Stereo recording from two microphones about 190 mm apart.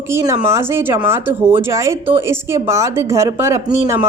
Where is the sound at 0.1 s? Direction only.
15° right (ahead or behind).